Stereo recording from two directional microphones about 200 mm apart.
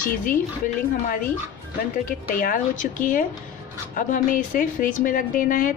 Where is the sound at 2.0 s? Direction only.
45° left (ahead or behind).